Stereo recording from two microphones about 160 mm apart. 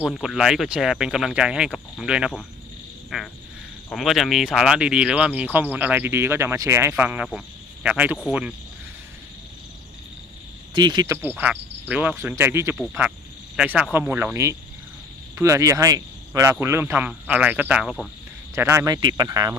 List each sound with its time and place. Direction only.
0.0 s speech: 5° right (ahead or behind)
10.8 s speech: 25° right (ahead or behind)
12.7 s speech: 5° left (ahead or behind)
18.5 s speech: 15° right (ahead or behind)